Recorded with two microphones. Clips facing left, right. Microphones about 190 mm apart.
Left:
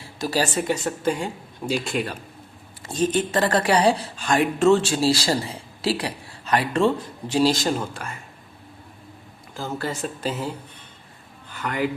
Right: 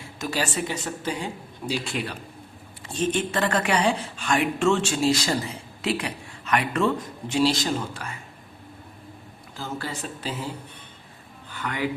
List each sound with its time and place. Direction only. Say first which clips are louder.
0.0 s speech: left 4 dB; 35° left (ahead or behind)
9.6 s speech: left 4 dB; 45° left (ahead or behind)
11.5 s speech: left 3 dB; 45° left (ahead or behind)